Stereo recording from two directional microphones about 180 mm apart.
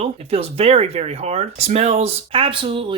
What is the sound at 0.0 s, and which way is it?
Speech, 35° right (ahead or behind).